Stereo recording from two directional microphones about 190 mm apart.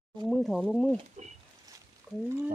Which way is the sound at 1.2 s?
40° right (ahead or behind).